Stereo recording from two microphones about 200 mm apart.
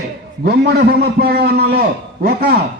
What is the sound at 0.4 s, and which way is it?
A man's voice, 50° right (ahead or behind).